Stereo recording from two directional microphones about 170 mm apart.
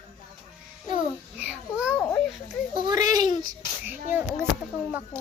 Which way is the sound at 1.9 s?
15° left (ahead or behind).